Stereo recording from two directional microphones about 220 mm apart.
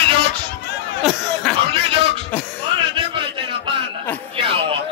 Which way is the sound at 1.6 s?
25° right (ahead or behind).